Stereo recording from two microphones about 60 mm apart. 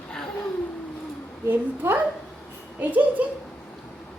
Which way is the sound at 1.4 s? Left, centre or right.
Right.